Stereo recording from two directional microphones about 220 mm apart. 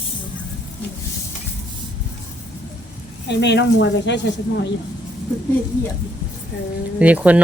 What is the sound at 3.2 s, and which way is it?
Speech, 50° left (ahead or behind).